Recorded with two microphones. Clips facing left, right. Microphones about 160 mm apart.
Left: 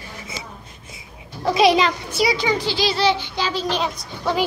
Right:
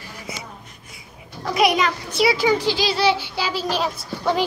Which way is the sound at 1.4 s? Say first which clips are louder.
Left 3 dB; 25° left (ahead or behind).